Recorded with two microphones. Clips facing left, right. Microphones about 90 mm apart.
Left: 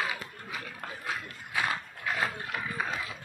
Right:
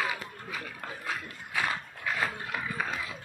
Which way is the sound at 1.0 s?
10° left (ahead or behind).